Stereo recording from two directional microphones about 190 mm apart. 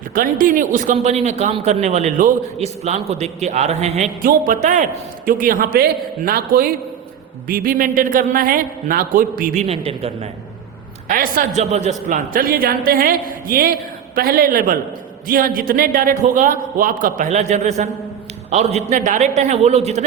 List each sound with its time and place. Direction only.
0.1 s a man's voice: 45° right (ahead or behind)
11.1 s a man's voice: 45° right (ahead or behind)